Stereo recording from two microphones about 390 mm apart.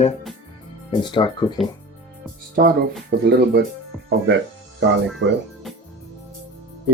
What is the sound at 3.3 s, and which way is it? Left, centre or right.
Speech, right.